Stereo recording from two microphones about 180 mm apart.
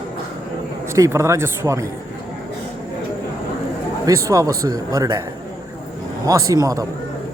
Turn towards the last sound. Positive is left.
turn(degrees=-20)  # may be behind; listen again after turning